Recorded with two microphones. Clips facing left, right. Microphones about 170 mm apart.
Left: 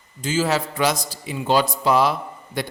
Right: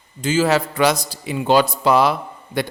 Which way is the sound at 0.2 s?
65° right (ahead or behind).